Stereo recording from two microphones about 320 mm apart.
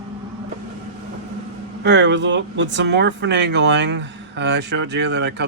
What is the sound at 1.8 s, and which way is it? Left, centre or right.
Speech, right.